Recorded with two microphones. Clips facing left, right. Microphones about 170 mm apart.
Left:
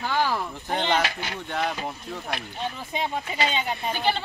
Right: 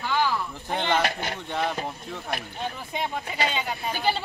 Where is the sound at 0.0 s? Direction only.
45° left (ahead or behind).